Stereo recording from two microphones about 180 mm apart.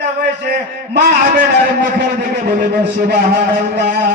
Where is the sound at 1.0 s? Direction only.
60° right (ahead or behind).